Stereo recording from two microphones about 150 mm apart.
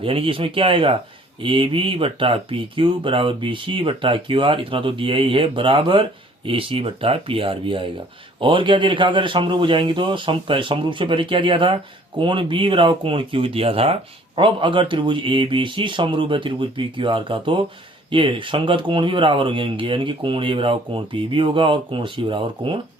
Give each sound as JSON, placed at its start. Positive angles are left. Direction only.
{"t": 0.0, "sound": "speech", "side_deg": -40}